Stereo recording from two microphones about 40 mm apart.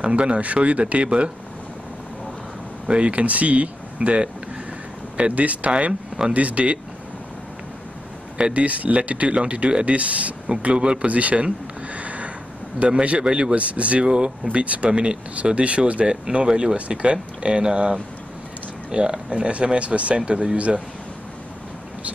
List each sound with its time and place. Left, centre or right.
0.0 s speech: right
2.9 s speech: right
5.3 s speech: right
5.7 s speech: right
6.3 s speech: right
8.4 s speech: right
8.6 s speech: right
10.6 s speech: right
11.1 s a sound: right
12.9 s speech: right
14.0 s speech: right
14.5 s speech: right
16.1 s speech: right